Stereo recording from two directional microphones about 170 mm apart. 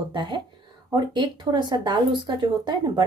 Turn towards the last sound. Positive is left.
turn(degrees=-25)  # may be behind; listen again after turning